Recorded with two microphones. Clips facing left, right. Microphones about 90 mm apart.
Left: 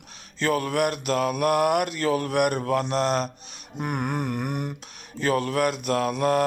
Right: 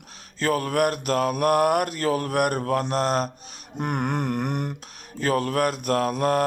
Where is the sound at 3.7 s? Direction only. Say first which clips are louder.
Right 2 dB; 55° right (ahead or behind).